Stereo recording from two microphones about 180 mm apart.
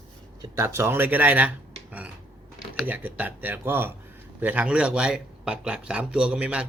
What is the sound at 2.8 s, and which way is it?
Speech, 10° right (ahead or behind).